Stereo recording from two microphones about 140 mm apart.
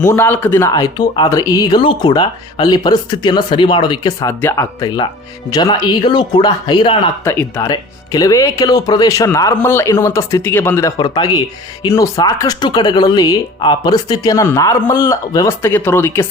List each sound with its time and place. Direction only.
0.1 s speech: 15° left (ahead or behind)
0.7 s speech: 30° left (ahead or behind)
4.4 s speech: 15° left (ahead or behind)
4.8 s speech: 30° left (ahead or behind)
7.3 s speech: 15° left (ahead or behind)